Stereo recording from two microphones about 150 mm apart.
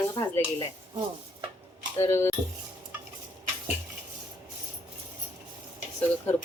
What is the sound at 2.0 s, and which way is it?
Speech, 20° left (ahead or behind).